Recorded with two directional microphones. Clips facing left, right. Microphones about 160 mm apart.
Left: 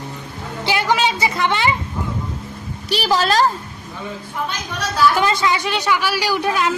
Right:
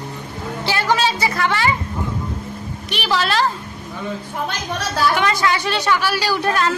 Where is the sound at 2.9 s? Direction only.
40° left (ahead or behind).